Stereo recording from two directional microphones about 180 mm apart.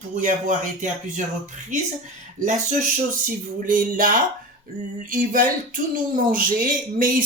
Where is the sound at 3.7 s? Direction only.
50° right (ahead or behind).